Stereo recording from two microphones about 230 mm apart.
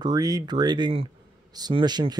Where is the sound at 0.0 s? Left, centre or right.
Centre.